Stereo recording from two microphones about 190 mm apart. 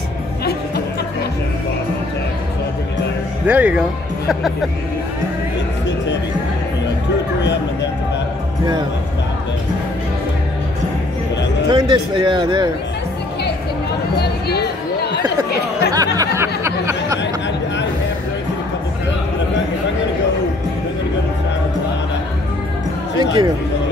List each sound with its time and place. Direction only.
3.4 s speech: 10° right (ahead or behind)
11.7 s a man's voice: 25° right (ahead or behind)
14.1 s music: 60° left (ahead or behind)
15.9 s speech: 20° right (ahead or behind)
23.1 s a man's voice: 20° right (ahead or behind)